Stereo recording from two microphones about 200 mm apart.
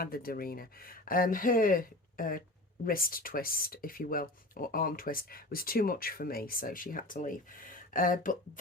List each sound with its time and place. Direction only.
0.0 s speech: 45° left (ahead or behind)